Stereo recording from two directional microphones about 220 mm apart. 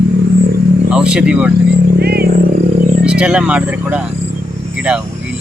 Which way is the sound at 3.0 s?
5° right (ahead or behind).